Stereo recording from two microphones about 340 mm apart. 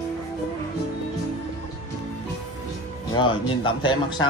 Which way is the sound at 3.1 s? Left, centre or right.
Centre.